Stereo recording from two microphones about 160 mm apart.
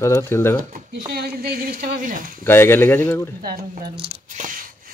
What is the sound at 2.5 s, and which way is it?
Speech, 15° left (ahead or behind).